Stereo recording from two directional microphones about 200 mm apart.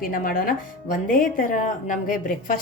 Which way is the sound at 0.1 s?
45° left (ahead or behind).